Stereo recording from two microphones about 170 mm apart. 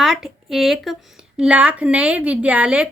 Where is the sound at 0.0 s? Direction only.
Centre (ahead or behind).